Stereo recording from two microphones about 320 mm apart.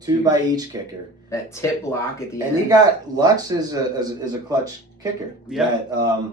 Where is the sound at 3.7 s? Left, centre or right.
Centre.